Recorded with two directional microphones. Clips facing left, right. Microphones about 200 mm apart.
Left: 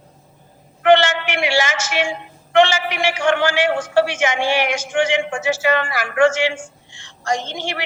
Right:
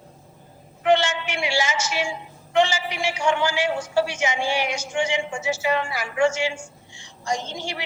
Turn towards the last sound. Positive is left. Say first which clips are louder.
# left 5 dB
turn(degrees=85)